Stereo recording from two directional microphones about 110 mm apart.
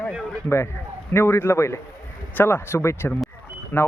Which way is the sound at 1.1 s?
20° left (ahead or behind).